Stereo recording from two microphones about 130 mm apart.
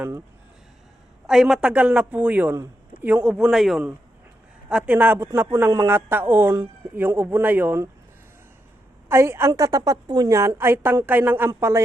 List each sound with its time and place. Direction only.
1.3 s a man's voice: 5° right (ahead or behind)
9.0 s a woman's voice: 20° right (ahead or behind)